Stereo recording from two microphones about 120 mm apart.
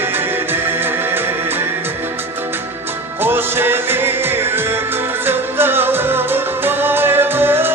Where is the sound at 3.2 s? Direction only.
20° right (ahead or behind).